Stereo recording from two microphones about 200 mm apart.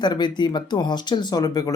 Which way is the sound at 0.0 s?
20° left (ahead or behind).